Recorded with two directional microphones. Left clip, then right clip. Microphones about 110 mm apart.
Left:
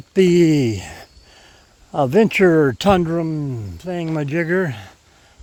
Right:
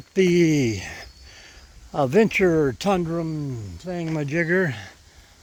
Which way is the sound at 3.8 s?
85° left.